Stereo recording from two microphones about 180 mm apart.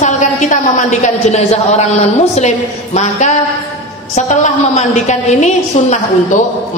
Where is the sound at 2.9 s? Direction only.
40° left (ahead or behind).